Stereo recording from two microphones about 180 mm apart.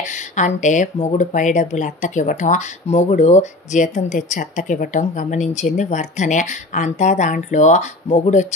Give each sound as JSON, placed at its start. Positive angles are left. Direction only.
{"t": 0.0, "sound": "speech", "side_deg": 45}